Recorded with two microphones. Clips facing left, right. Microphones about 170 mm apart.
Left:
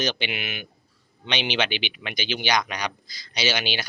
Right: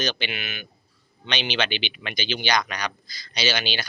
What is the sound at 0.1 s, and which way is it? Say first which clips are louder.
Speech: left 1 dB; 15° left (ahead or behind).